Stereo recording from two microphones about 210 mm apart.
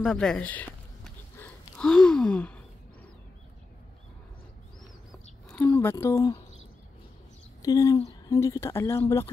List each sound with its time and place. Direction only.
0.0 s a sound: 5° left (ahead or behind)
5.5 s speech: 10° left (ahead or behind)
7.6 s speech: 15° left (ahead or behind)